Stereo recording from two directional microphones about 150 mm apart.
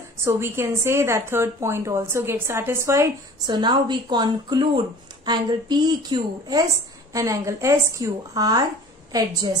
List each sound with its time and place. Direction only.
0.2 s a woman's voice: 15° right (ahead or behind)
3.4 s a woman's voice: 30° right (ahead or behind)